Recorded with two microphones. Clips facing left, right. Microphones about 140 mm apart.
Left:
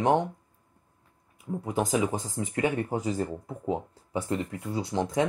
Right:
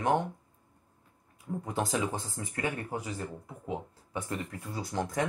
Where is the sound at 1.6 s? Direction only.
10° left (ahead or behind).